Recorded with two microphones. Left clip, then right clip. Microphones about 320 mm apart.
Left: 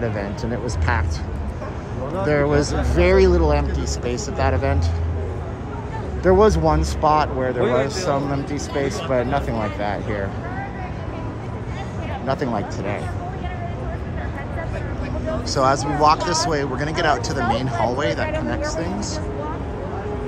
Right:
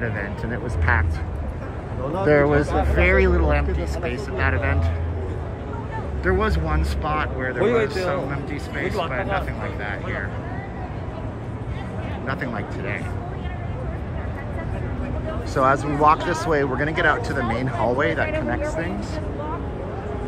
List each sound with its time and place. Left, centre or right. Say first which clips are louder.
0.0 s speech: left 2 dB; centre
2.2 s speech: right 2 dB; centre
6.2 s speech: left 8 dB; centre
7.6 s speech: right 2 dB; right
9.1 s speech: left 4 dB; centre
12.3 s speech: left 6 dB; centre
15.5 s speech: even; centre